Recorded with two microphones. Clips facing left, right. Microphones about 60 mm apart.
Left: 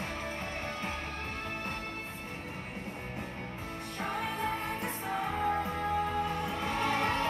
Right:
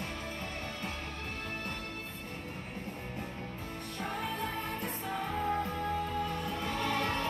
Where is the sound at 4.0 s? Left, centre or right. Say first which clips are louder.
Left 2 dB; left.